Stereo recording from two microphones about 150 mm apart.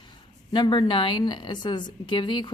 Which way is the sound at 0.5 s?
30° left (ahead or behind).